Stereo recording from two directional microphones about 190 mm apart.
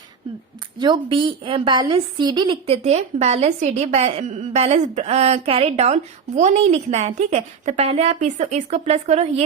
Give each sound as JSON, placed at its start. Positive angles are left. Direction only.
{"t": 0.8, "sound": "a woman's voice", "side_deg": -25}